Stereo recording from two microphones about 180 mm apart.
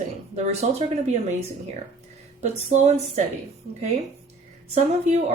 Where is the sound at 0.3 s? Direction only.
40° right (ahead or behind).